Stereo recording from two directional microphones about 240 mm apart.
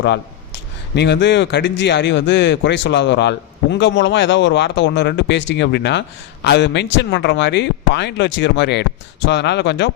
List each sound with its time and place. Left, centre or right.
0.9 s a man's voice: left